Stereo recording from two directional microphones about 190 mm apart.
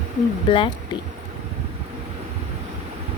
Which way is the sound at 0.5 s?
30° left (ahead or behind).